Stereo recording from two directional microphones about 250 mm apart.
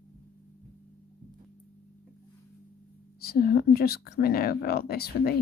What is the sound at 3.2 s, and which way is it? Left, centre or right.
Speech, left.